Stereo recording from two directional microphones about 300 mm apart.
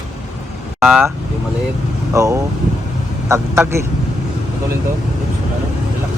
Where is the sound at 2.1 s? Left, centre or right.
Centre.